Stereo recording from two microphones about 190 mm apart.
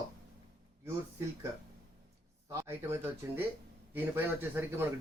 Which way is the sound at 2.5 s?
15° right (ahead or behind).